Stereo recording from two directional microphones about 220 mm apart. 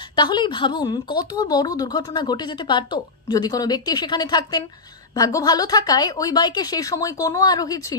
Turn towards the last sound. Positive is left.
turn(degrees=15)  # may be behind; listen again after turning